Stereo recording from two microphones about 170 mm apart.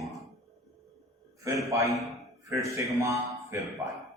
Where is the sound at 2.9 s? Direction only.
20° right (ahead or behind).